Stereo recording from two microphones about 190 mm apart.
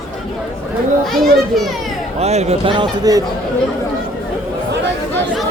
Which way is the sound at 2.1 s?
35° right (ahead or behind).